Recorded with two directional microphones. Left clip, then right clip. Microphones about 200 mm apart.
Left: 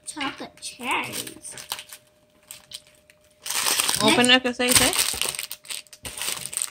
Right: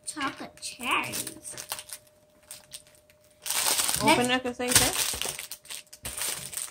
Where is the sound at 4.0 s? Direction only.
30° left (ahead or behind).